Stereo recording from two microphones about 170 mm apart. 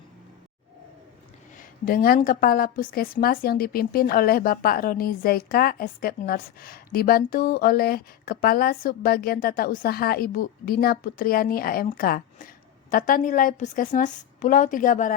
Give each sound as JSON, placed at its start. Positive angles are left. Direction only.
{"t": 1.5, "sound": "a woman's voice", "side_deg": 60}